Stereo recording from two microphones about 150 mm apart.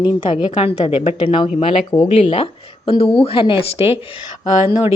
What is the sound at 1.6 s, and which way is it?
Speech, 25° left (ahead or behind).